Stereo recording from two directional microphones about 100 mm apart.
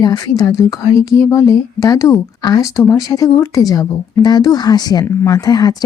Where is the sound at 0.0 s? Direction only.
40° left (ahead or behind).